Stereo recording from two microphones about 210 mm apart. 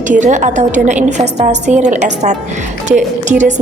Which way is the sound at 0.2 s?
35° right (ahead or behind).